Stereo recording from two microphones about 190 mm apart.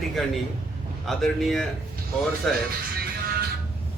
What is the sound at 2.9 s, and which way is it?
Music, 50° right (ahead or behind).